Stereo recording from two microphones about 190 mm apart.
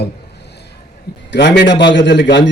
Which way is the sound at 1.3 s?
65° left (ahead or behind).